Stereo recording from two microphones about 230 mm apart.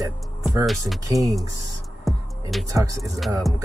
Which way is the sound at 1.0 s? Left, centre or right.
Centre.